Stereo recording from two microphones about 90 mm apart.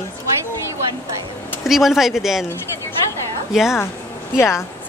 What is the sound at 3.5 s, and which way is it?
Speech, 5° right (ahead or behind).